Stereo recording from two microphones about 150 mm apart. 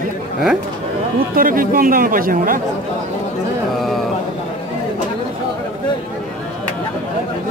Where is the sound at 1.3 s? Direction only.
70° right (ahead or behind).